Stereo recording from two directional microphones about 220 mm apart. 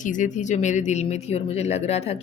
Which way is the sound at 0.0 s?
35° left (ahead or behind).